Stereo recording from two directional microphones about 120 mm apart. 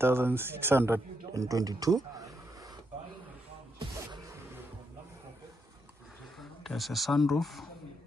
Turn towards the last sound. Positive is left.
turn(degrees=0)  # may be behind; listen again after turning